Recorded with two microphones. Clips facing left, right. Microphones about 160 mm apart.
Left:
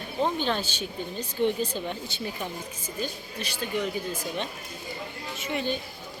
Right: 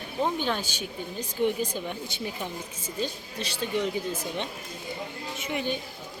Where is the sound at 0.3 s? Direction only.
10° right (ahead or behind).